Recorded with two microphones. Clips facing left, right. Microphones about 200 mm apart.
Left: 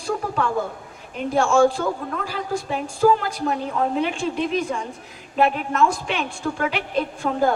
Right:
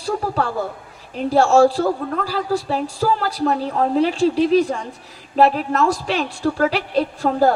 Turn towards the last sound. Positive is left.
turn(degrees=-35)  # may be behind; listen again after turning